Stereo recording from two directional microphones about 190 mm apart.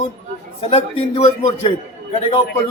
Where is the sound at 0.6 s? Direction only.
30° left (ahead or behind).